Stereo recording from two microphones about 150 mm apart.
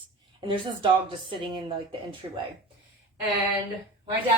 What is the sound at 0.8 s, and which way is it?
Speech, 35° right (ahead or behind).